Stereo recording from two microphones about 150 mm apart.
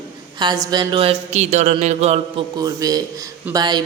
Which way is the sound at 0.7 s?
30° right (ahead or behind).